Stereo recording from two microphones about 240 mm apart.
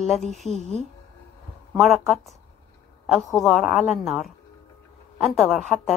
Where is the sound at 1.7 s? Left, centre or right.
Centre.